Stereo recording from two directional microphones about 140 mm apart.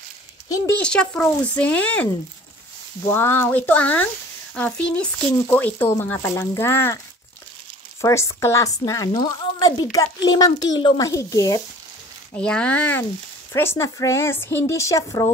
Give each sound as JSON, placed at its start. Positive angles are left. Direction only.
{"t": 0.8, "sound": "speech", "side_deg": 5}
{"t": 3.1, "sound": "speech", "side_deg": 15}
{"t": 8.0, "sound": "a woman's voice", "side_deg": 20}
{"t": 12.4, "sound": "a woman's voice", "side_deg": 5}